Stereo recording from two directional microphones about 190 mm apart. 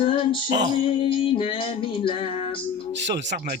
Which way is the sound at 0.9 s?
30° left (ahead or behind).